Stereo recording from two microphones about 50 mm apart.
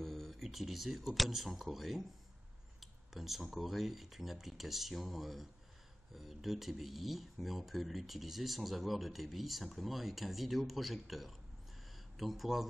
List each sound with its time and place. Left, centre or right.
0.0 s speech: centre